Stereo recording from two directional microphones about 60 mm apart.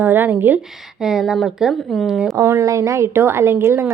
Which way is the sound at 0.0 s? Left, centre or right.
Right.